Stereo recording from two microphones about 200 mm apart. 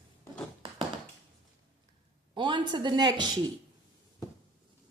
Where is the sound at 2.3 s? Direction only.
25° right (ahead or behind).